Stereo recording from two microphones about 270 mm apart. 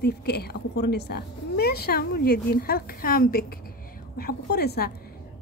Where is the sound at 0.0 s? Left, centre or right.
Left.